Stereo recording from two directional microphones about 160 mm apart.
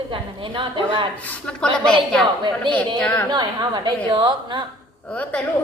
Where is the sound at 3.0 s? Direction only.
10° left (ahead or behind).